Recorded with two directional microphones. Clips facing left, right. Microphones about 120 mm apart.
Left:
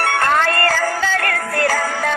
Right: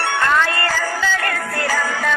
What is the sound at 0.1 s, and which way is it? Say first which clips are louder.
Music: right 1 dB; 50° left (ahead or behind).